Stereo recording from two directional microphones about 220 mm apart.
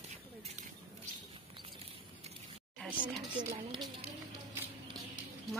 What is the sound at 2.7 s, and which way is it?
Speech, centre (ahead or behind).